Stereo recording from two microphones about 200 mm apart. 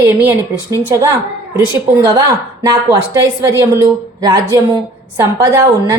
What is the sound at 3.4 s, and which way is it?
Speech, 15° right (ahead or behind).